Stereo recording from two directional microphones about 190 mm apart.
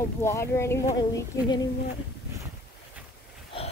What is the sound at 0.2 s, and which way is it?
Speech, 15° left (ahead or behind).